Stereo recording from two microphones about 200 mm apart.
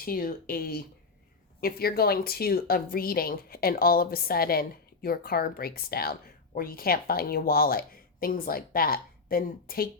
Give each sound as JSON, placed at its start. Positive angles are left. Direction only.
{"t": 0.0, "sound": "speech", "side_deg": 45}